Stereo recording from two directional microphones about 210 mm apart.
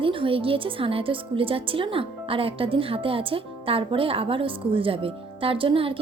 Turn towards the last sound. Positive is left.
turn(degrees=-25)  # may be behind; listen again after turning